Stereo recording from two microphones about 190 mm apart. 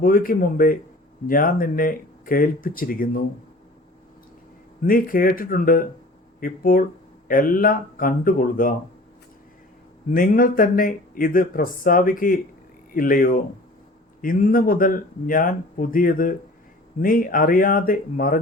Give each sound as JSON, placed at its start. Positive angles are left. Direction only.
{"t": 0.0, "sound": "speech", "side_deg": 50}
{"t": 4.8, "sound": "speech", "side_deg": 50}
{"t": 10.1, "sound": "speech", "side_deg": 50}